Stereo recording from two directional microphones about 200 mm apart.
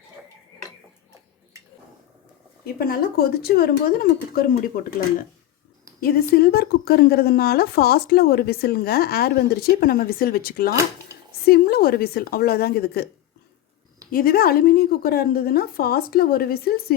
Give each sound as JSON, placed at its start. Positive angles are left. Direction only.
{"t": 2.7, "sound": "a woman's voice", "side_deg": 50}
{"t": 6.0, "sound": "a woman's voice", "side_deg": 50}
{"t": 14.1, "sound": "a woman's voice", "side_deg": 45}